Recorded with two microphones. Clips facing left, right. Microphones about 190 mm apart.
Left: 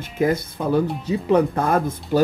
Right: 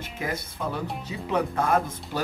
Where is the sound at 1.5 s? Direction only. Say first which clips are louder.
Left 4 dB; 40° left (ahead or behind).